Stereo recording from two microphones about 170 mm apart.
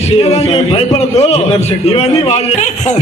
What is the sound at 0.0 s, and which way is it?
A man's voice, 40° left (ahead or behind).